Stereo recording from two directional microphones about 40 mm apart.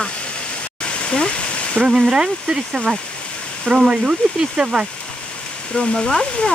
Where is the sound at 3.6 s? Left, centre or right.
Right.